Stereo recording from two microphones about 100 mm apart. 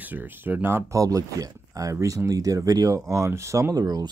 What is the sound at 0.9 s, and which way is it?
Speech, 35° right (ahead or behind).